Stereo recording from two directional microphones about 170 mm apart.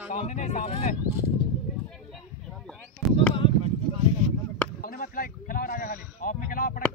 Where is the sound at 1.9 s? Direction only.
5° left (ahead or behind).